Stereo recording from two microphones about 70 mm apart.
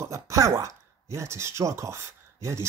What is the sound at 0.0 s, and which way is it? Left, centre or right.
Speech, right.